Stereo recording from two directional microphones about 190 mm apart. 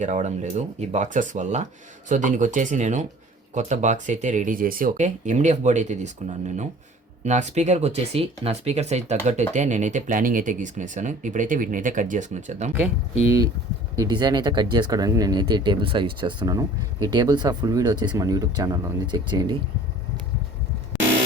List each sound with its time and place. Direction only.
0.0 s speech: 40° right (ahead or behind)
13.2 s speech: 15° right (ahead or behind)